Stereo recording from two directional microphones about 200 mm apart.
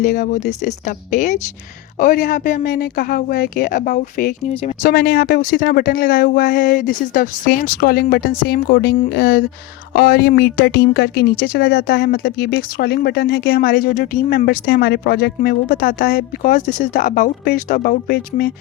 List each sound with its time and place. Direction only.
0.0 s speech: 40° left (ahead or behind)